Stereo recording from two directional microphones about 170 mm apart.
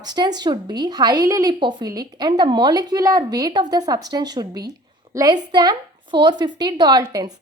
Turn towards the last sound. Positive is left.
turn(degrees=-20)  # may be behind; listen again after turning